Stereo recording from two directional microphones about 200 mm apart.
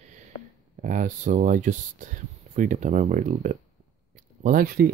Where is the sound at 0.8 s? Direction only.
40° right (ahead or behind).